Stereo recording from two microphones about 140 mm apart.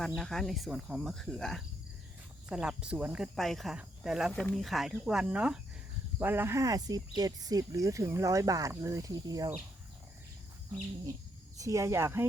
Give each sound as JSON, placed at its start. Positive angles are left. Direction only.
{"t": 0.2, "sound": "cricket", "side_deg": 0}
{"t": 2.5, "sound": "speech", "side_deg": -5}
{"t": 3.3, "sound": "cricket", "side_deg": 0}
{"t": 6.1, "sound": "speech", "side_deg": -15}
{"t": 11.5, "sound": "speech", "side_deg": -25}